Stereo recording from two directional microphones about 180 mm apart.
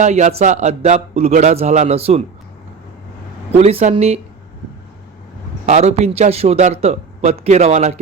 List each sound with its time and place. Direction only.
0.0 s speech: 40° right (ahead or behind)
3.5 s speech: 35° right (ahead or behind)
5.6 s speech: 40° right (ahead or behind)